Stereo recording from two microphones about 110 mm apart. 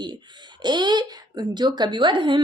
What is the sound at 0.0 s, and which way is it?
A woman's voice, 40° right (ahead or behind).